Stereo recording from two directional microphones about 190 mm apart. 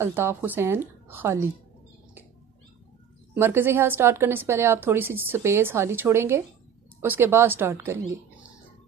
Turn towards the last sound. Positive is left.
turn(degrees=-10)  # may be behind; listen again after turning